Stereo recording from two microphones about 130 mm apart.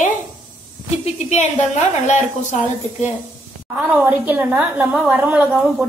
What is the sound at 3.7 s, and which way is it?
A woman's voice, 15° right (ahead or behind).